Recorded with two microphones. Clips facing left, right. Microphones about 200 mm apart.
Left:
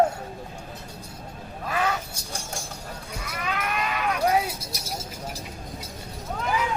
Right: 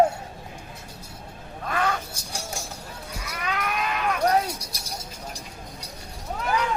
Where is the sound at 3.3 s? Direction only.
Centre (ahead or behind).